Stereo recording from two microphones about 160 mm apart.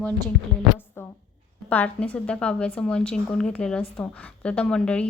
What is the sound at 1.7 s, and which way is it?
A woman's voice, 10° left (ahead or behind).